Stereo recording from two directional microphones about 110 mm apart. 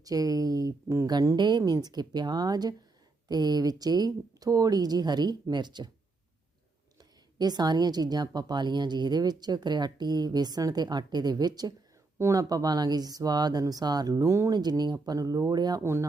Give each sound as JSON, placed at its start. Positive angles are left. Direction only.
{"t": 0.0, "sound": "speech", "side_deg": -35}
{"t": 1.4, "sound": "speech", "side_deg": -40}
{"t": 7.3, "sound": "speech", "side_deg": -40}
{"t": 14.5, "sound": "speech", "side_deg": -40}
{"t": 15.8, "sound": "speech", "side_deg": -25}